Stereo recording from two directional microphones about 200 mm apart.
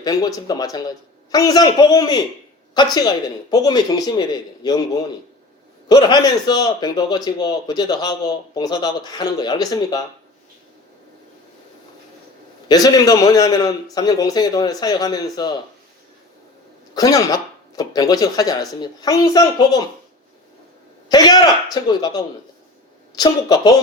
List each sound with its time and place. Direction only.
0.0 s a man's voice: 20° left (ahead or behind)
5.9 s a man's voice: 20° left (ahead or behind)
12.6 s a man's voice: 20° left (ahead or behind)
16.9 s a man's voice: 20° left (ahead or behind)
21.1 s a man's voice: 20° left (ahead or behind)